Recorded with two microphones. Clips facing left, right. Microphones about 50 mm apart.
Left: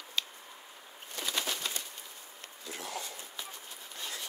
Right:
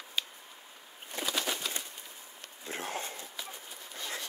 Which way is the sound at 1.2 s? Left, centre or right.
Centre.